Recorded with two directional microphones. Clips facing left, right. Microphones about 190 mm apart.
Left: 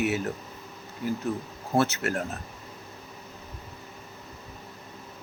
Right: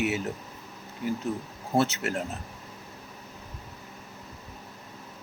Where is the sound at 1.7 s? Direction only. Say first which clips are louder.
Left 1 dB; 25° right (ahead or behind).